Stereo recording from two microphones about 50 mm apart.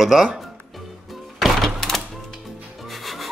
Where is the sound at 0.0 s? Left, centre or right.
Centre.